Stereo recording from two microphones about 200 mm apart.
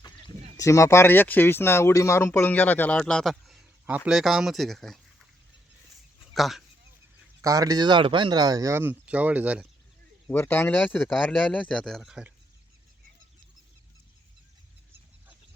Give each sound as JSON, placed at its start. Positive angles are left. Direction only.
{"t": 0.5, "sound": "speech", "side_deg": 15}
{"t": 6.3, "sound": "speech", "side_deg": 0}
{"t": 7.4, "sound": "speech", "side_deg": -15}
{"t": 10.2, "sound": "speech", "side_deg": 10}